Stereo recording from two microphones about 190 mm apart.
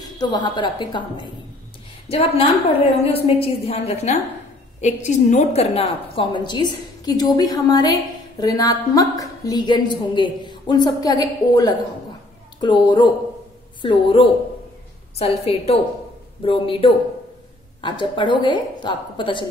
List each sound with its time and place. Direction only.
0.0 s a woman's voice: 20° left (ahead or behind)